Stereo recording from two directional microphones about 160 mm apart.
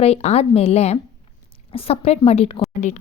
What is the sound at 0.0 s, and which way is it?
A woman's voice, 40° left (ahead or behind).